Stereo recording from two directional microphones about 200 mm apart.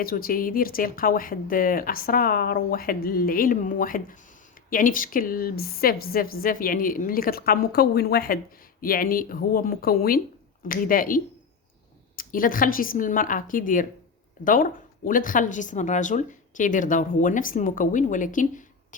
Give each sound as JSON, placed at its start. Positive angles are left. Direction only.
{"t": 0.0, "sound": "a woman's voice", "side_deg": 45}